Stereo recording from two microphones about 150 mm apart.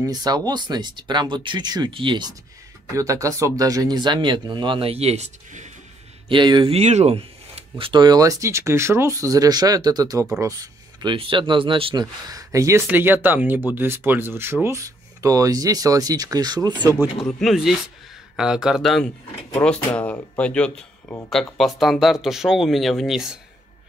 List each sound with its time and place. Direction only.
0.0 s speech: 25° right (ahead or behind)
3.0 s speech: 20° right (ahead or behind); by 5.7 s 50° right (ahead or behind)
6.2 s speech: 30° right (ahead or behind)
7.8 s speech: 30° right (ahead or behind)
17.2 s speech: centre (ahead or behind)